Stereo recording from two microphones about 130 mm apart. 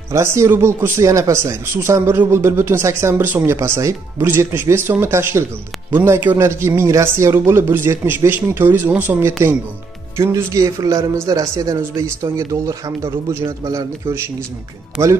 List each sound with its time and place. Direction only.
0.1 s speech: 20° right (ahead or behind)
15.0 s speech: 20° right (ahead or behind)